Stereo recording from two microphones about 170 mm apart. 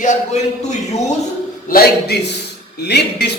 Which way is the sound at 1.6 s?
60° left (ahead or behind).